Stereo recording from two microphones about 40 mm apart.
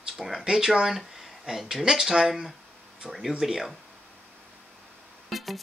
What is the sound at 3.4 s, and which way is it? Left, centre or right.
Speech, centre.